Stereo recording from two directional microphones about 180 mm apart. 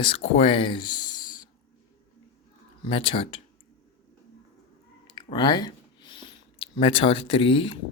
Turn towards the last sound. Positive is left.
turn(degrees=30)  # may be behind; listen again after turning